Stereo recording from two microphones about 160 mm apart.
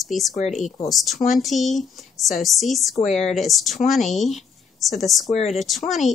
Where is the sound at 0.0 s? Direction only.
Centre (ahead or behind).